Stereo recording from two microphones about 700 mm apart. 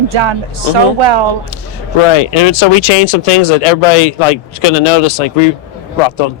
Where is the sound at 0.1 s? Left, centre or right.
Right.